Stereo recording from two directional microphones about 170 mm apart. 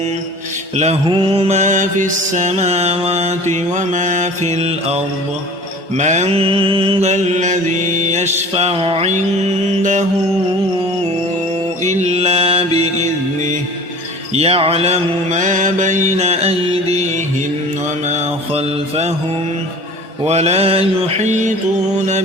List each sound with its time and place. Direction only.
1.0 s mantra: 30° right (ahead or behind)
6.0 s mantra: 45° right (ahead or behind)
11.9 s mantra: 40° right (ahead or behind)
18.1 s mantra: 40° right (ahead or behind)
20.2 s mantra: 40° right (ahead or behind)